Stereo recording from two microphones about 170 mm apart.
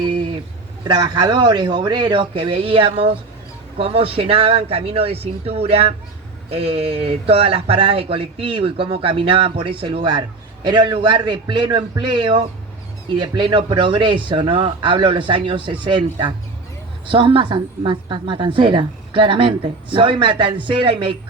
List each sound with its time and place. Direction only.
0.9 s a woman's voice: 25° right (ahead or behind)